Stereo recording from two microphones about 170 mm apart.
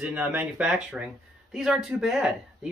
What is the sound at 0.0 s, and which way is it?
Speech, 5° right (ahead or behind).